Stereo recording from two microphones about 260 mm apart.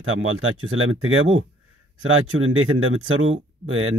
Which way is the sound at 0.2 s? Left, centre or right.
Right.